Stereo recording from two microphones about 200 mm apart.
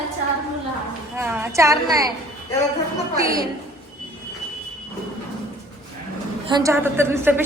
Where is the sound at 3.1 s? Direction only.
15° right (ahead or behind).